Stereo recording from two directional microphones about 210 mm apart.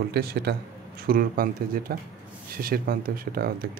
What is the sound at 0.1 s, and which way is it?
Speech, 50° right (ahead or behind).